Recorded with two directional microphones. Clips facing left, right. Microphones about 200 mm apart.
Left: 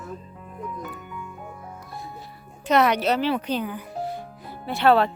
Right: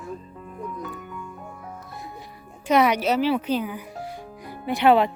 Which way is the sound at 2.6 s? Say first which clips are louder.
Even; 10° right (ahead or behind).